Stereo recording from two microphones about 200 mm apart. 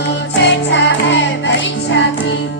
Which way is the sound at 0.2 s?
60° left (ahead or behind).